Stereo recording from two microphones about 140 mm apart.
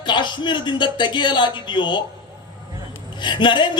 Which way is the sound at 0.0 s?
35° left (ahead or behind).